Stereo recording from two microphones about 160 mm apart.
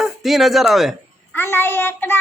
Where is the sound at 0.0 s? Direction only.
Centre (ahead or behind).